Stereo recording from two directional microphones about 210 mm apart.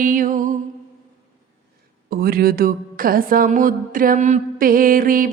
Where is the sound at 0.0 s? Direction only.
40° right (ahead or behind).